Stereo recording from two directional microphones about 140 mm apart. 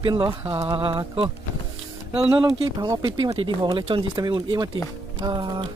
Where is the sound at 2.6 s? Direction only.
25° right (ahead or behind).